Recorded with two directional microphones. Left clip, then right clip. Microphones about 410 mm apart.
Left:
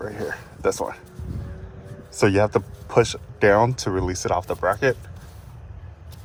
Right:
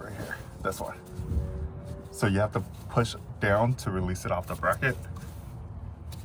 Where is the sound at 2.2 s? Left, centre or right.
Centre.